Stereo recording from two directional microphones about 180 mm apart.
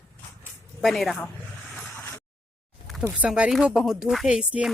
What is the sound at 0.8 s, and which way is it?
Speech, centre (ahead or behind).